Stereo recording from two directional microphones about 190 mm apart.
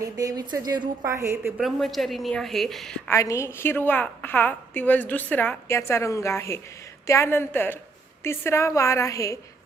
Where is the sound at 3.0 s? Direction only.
15° left (ahead or behind).